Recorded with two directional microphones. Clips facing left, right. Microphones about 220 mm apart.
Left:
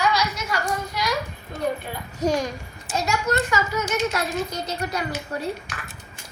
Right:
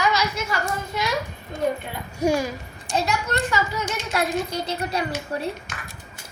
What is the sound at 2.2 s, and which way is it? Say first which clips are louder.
Speech: right 1 dB; 10° right (ahead or behind).